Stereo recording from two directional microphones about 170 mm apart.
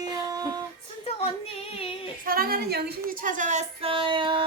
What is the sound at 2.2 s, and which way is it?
A woman's voice, 60° right (ahead or behind).